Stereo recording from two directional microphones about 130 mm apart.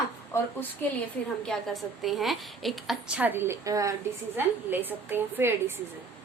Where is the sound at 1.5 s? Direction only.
Centre (ahead or behind); by 3.9 s 25° right (ahead or behind).